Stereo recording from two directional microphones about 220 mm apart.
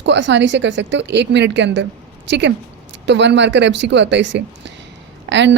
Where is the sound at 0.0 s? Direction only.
55° right (ahead or behind).